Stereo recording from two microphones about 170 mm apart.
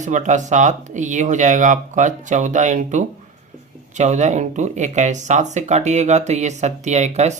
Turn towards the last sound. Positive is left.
turn(degrees=-40)  # may be behind; listen again after turning